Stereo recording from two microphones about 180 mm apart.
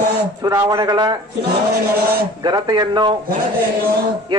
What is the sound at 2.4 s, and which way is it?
Speech, 25° right (ahead or behind).